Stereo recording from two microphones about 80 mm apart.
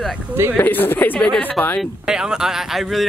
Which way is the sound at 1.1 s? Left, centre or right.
Centre.